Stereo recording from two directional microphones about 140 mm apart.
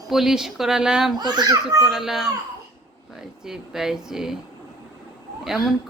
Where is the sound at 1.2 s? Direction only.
30° right (ahead or behind).